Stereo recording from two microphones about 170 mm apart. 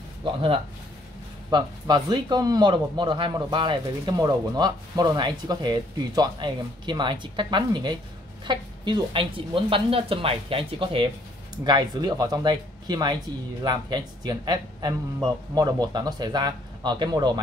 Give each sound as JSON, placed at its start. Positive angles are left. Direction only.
{"t": 0.2, "sound": "a woman's voice", "side_deg": -30}